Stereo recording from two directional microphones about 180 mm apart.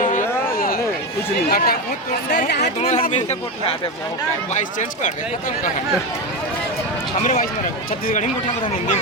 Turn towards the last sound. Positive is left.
turn(degrees=45)  # may be behind; listen again after turning